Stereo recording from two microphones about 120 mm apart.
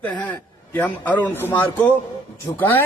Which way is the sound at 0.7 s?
15° left (ahead or behind).